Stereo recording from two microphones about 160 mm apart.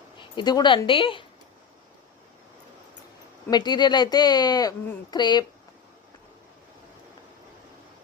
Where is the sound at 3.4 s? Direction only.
25° left (ahead or behind).